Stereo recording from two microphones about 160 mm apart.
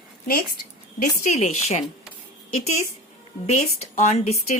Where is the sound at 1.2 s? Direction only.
45° left (ahead or behind).